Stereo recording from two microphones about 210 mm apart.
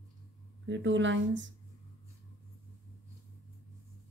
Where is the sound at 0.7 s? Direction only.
60° right (ahead or behind).